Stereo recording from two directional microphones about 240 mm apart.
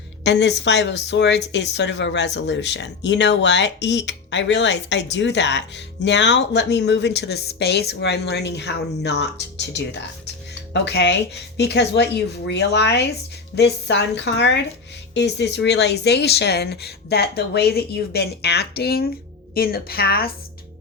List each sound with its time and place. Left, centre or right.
0.3 s a woman's voice: left